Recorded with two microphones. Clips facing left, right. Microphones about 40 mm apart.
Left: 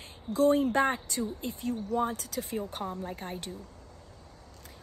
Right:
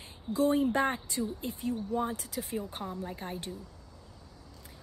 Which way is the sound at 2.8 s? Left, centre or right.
Centre.